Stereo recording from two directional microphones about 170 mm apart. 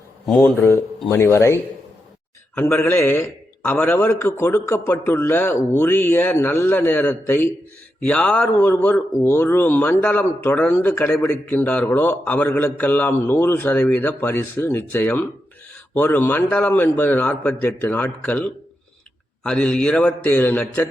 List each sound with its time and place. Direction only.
0.3 s speech: 5° left (ahead or behind)